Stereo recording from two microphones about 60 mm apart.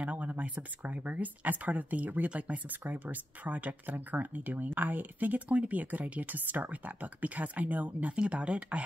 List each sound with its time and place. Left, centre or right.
0.0 s speech: right